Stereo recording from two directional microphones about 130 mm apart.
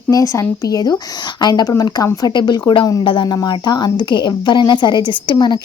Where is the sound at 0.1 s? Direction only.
25° left (ahead or behind).